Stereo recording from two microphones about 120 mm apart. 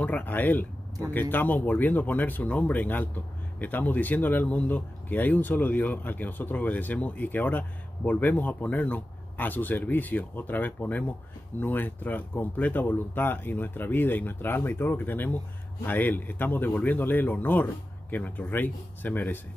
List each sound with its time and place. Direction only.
0.0 s speech: 15° left (ahead or behind)